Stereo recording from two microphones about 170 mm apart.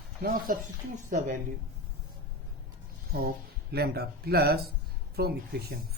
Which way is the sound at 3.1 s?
65° right (ahead or behind).